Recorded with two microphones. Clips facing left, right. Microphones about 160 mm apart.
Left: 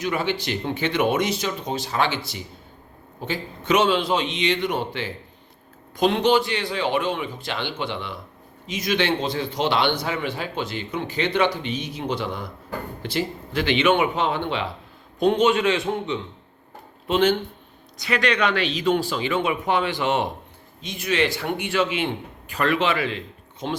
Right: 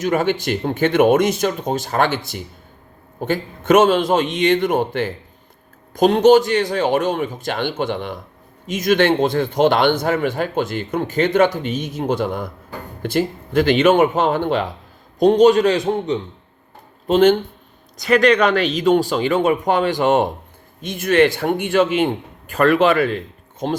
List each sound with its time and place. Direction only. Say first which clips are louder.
0.0 s a man's voice: right 6 dB; 45° right (ahead or behind)